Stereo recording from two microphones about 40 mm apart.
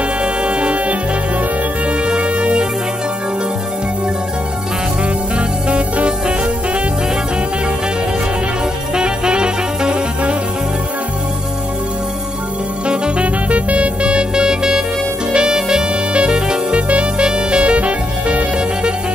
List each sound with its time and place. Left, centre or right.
0.2 s music: right
2.0 s music: right
5.7 s music: right
8.9 s saxophone: right
12.8 s music: right